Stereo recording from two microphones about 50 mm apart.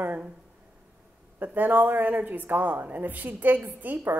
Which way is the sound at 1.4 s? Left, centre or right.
Right.